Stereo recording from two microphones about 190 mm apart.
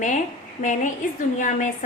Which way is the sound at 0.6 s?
40° left (ahead or behind).